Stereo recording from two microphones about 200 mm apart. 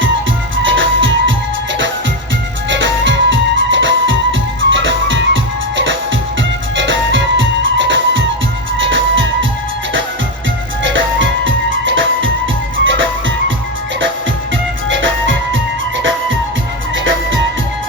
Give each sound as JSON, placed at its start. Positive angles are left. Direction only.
{"t": 0.6, "sound": "music", "side_deg": -70}
{"t": 2.6, "sound": "music", "side_deg": -65}
{"t": 10.8, "sound": "music", "side_deg": -70}
{"t": 14.8, "sound": "music", "side_deg": -70}
{"t": 17.0, "sound": "music", "side_deg": -70}